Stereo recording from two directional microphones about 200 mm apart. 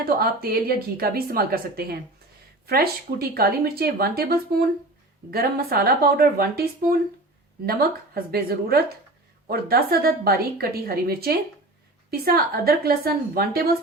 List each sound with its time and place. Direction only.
0.0 s a woman's voice: 50° right (ahead or behind)
7.6 s a woman's voice: 50° right (ahead or behind)